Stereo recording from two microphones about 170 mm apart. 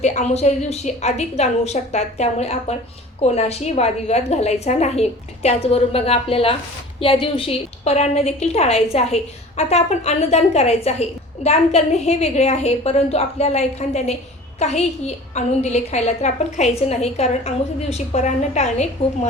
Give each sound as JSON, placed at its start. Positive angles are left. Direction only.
{"t": 0.0, "sound": "a woman's voice", "side_deg": 40}